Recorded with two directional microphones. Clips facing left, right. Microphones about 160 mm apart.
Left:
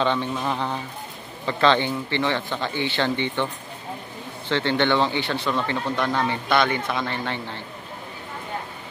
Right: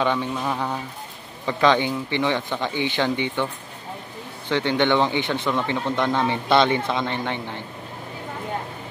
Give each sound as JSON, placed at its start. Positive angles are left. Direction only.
{"t": 0.0, "sound": "speech", "side_deg": -10}
{"t": 4.5, "sound": "speech", "side_deg": -15}